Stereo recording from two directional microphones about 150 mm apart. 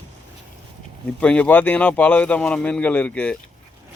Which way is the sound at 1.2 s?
10° left (ahead or behind).